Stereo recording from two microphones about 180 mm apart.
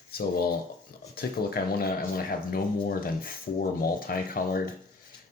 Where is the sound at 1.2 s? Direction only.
60° left (ahead or behind).